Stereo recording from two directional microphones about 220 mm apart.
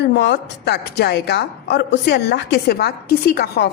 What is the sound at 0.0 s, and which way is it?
A woman's voice, 50° left (ahead or behind).